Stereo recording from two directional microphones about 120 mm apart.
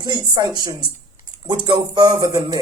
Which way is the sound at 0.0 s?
40° right (ahead or behind).